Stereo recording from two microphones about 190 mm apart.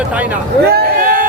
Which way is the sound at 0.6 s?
50° right (ahead or behind).